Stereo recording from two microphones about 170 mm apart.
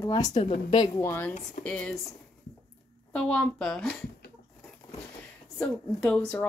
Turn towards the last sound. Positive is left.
turn(degrees=10)  # may be behind; listen again after turning